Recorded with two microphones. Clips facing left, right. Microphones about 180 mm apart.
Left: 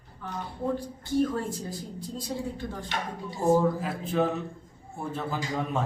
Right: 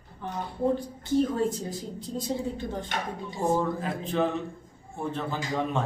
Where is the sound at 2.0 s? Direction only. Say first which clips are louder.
Right 3 dB; 20° right (ahead or behind).